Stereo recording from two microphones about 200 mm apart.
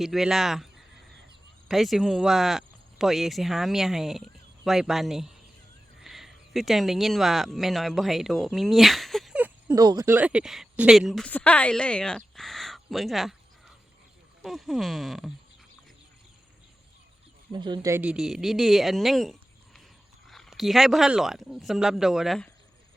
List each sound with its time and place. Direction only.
0.0 s speech: centre (ahead or behind)
17.5 s speech: 25° right (ahead or behind)
17.9 s speech: 5° right (ahead or behind)